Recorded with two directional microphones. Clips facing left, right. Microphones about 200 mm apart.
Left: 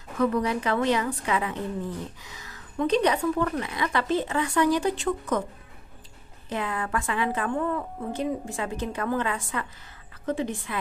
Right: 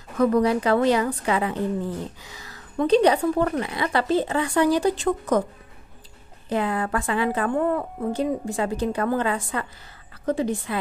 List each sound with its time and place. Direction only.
0.2 s a woman's voice: 40° right (ahead or behind)
6.5 s a woman's voice: 35° right (ahead or behind)